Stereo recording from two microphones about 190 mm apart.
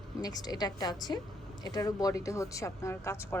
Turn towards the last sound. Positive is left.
turn(degrees=15)  # may be behind; listen again after turning